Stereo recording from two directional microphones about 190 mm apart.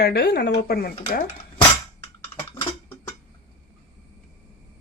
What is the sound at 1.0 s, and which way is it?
Speech, 45° left (ahead or behind).